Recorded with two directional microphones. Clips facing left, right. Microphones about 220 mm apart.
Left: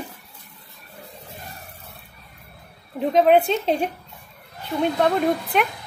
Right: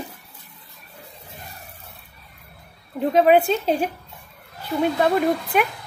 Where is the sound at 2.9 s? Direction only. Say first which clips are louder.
Even; 5° right (ahead or behind).